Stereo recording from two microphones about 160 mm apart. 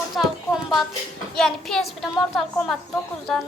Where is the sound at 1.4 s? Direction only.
Centre (ahead or behind).